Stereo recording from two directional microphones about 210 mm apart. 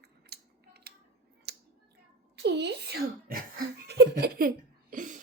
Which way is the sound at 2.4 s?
55° right (ahead or behind).